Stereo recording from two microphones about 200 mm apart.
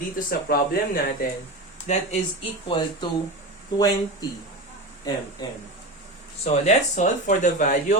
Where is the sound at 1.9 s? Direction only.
35° left (ahead or behind).